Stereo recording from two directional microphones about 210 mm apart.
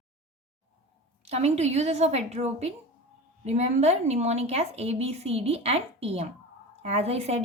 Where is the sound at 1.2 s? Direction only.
30° right (ahead or behind).